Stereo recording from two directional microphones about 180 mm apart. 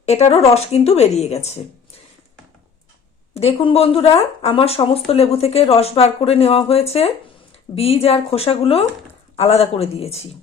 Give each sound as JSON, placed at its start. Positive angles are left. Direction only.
{"t": 0.0, "sound": "speech", "side_deg": 40}
{"t": 3.3, "sound": "speech", "side_deg": 35}